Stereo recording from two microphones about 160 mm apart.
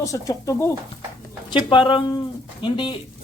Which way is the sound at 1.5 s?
30° left (ahead or behind).